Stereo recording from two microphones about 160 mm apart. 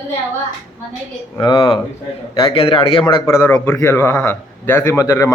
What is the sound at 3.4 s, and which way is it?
A man's voice, 10° left (ahead or behind).